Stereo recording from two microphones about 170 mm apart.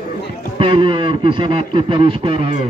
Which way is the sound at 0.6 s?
30° right (ahead or behind).